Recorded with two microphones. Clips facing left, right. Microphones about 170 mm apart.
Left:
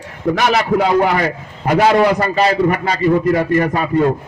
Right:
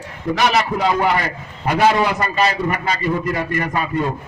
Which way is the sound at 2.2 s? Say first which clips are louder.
Left 4 dB; 30° left (ahead or behind).